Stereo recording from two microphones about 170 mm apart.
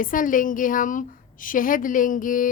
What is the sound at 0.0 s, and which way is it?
A woman's voice, 55° left (ahead or behind).